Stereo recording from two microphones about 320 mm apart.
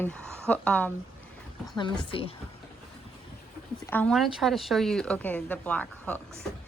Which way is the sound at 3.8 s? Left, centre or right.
Centre.